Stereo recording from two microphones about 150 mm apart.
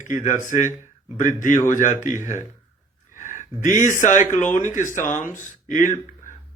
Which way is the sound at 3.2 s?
60° left (ahead or behind).